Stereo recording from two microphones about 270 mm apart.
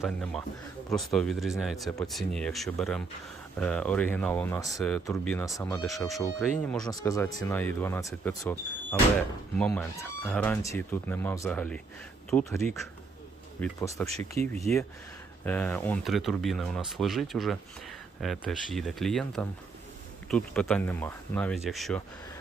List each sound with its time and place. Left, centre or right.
0.0 s speech: centre
5.8 s speech: centre
14.1 s speech: right
14.7 s speech: centre